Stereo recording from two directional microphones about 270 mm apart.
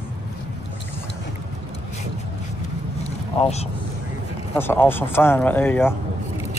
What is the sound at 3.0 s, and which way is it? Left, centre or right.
Vehicle, left.